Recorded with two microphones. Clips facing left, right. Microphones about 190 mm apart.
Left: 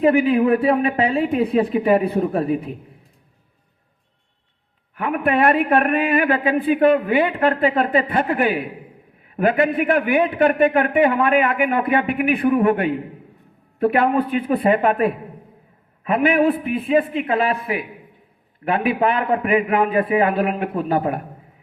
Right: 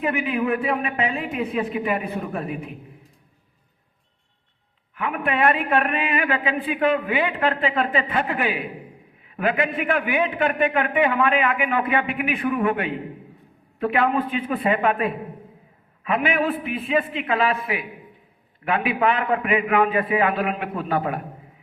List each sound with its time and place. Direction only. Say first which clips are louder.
0.0 s speech: left 8 dB; 35° left (ahead or behind)
4.9 s speech: left 5 dB; 40° left (ahead or behind)
16.0 s speech: left 6 dB; 35° left (ahead or behind)